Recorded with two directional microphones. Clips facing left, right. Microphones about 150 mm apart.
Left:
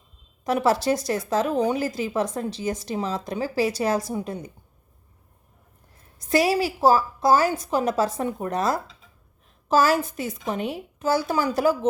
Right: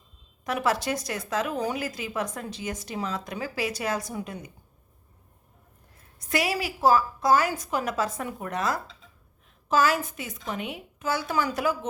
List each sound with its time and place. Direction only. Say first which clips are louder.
0.4 s speech: left 5 dB; 35° left (ahead or behind)
6.1 s speech: left 7 dB; 30° left (ahead or behind)